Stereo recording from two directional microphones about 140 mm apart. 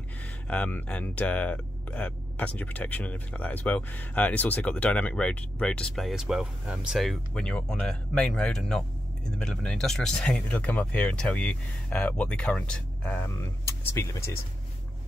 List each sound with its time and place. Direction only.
0.5 s speech: 10° left (ahead or behind)